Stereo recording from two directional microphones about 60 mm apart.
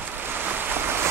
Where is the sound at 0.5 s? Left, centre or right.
Right.